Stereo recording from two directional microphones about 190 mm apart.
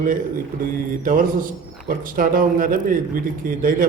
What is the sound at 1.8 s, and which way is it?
A man's voice, 45° right (ahead or behind).